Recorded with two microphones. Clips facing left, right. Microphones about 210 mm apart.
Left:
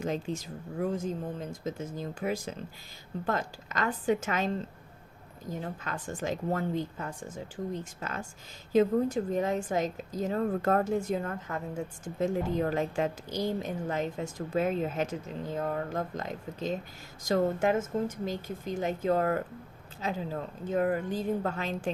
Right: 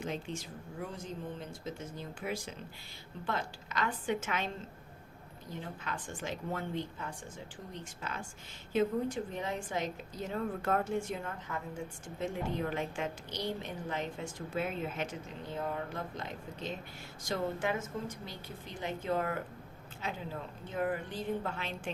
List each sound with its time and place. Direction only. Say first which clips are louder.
0.0 s speech: left 6 dB; 40° left (ahead or behind)
8.7 s speech: left 6 dB; 40° left (ahead or behind)
11.2 s a woman's voice: left 6 dB; 60° left (ahead or behind)
12.2 s speech: left 7 dB; 40° left (ahead or behind)